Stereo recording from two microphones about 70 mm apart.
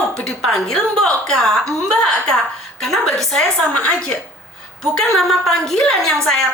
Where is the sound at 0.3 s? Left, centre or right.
Centre.